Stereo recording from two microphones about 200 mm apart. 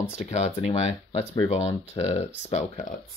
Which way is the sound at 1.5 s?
35° left (ahead or behind).